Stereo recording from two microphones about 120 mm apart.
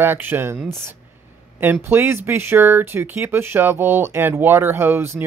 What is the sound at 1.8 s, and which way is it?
Speech, 20° right (ahead or behind).